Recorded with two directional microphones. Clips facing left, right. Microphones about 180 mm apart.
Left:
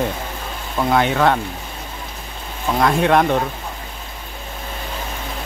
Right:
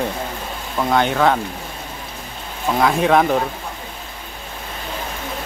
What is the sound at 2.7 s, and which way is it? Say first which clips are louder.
Speech: even; centre (ahead or behind).